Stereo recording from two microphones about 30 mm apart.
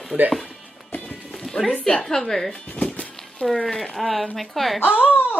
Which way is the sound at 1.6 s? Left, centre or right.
Left.